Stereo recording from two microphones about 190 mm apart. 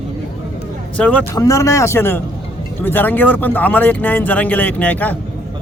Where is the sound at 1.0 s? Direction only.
5° left (ahead or behind).